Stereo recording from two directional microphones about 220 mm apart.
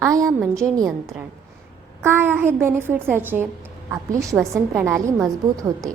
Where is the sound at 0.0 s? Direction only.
15° right (ahead or behind).